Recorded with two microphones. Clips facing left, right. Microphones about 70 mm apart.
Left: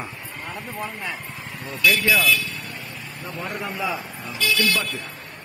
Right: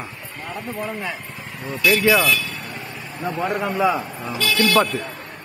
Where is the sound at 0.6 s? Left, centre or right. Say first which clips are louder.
Right 5 dB; centre.